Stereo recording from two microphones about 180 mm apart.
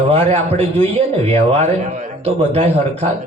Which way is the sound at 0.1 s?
35° right (ahead or behind).